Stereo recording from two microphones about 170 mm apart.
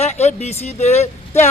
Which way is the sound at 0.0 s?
40° left (ahead or behind).